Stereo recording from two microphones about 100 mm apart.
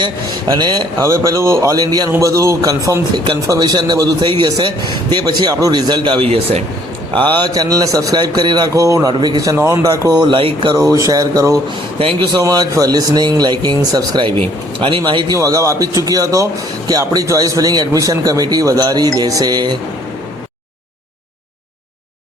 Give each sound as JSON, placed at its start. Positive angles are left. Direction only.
{"t": 0.4, "sound": "speech", "side_deg": -45}
{"t": 1.0, "sound": "a man's voice", "side_deg": -35}
{"t": 6.2, "sound": "speech", "side_deg": -80}
{"t": 7.2, "sound": "speech", "side_deg": -45}
{"t": 8.7, "sound": "a man's voice", "side_deg": -35}
{"t": 9.6, "sound": "a man's voice", "side_deg": -30}
{"t": 10.2, "sound": "a man's voice", "side_deg": -60}
{"t": 10.8, "sound": "a man's voice", "side_deg": -35}
{"t": 11.9, "sound": "speech", "side_deg": -70}
{"t": 12.3, "sound": "a man's voice", "side_deg": -40}
{"t": 15.4, "sound": "a man's voice", "side_deg": -35}